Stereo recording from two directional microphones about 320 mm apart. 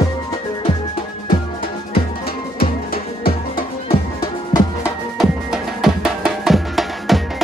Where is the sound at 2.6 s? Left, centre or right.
Left.